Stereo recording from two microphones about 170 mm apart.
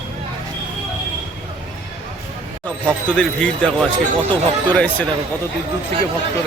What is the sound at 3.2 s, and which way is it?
Speech, 5° left (ahead or behind).